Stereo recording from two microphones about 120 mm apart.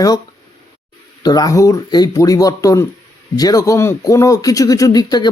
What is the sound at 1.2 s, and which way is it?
Speech, 35° left (ahead or behind).